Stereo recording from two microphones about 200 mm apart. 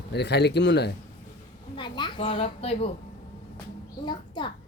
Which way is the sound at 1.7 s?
25° left (ahead or behind).